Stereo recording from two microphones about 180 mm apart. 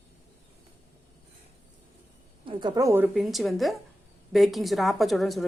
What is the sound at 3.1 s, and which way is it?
A woman's voice, centre (ahead or behind).